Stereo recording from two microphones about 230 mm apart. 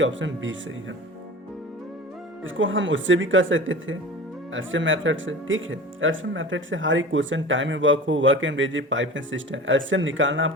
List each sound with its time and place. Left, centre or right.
0.0 s speech: right
2.4 s speech: right